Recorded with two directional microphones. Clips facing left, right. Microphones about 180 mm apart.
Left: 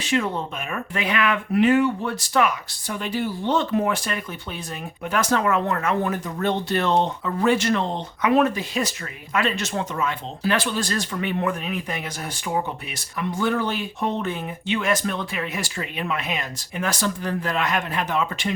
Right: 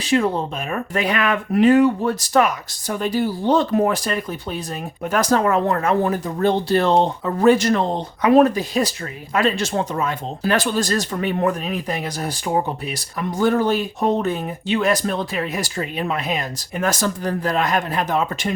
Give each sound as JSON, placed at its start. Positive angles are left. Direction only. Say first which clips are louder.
{"t": 0.0, "sound": "speech", "louder": "right 5 dB", "side_deg": -35}